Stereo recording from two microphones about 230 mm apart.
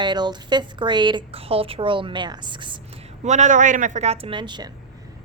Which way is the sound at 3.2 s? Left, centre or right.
Right.